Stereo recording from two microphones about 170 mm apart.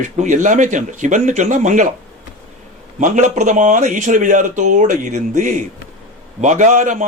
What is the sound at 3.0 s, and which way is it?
A man's voice, 45° right (ahead or behind).